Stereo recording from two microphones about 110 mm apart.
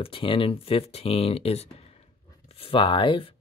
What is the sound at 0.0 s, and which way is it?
Speech, 55° left (ahead or behind).